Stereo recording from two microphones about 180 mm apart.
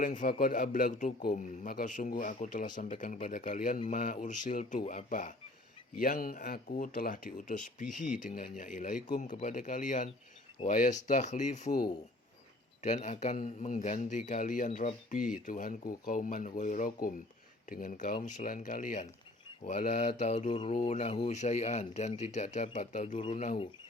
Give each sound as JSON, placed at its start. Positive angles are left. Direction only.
{"t": 0.0, "sound": "speech", "side_deg": 50}
{"t": 20.5, "sound": "speech", "side_deg": 25}
{"t": 20.8, "sound": "speech", "side_deg": 40}